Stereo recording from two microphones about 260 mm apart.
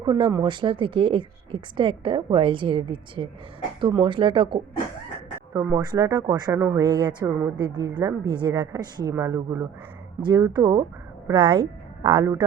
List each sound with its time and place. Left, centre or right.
0.0 s a woman's voice: centre